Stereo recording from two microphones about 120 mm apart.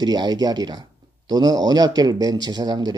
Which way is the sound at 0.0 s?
35° right (ahead or behind).